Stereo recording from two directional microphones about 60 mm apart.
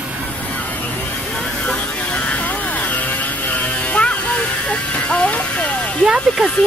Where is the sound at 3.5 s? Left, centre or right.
Left.